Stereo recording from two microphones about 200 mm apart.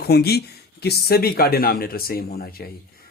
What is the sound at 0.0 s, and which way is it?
Speech, 50° left (ahead or behind).